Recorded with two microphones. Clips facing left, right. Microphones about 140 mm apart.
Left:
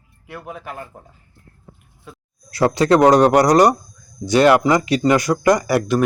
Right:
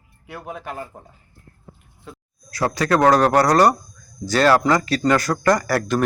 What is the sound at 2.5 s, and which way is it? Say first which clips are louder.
Speech: left 5 dB; 25° left (ahead or behind).